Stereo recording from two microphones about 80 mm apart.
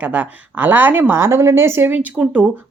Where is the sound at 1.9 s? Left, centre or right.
Centre.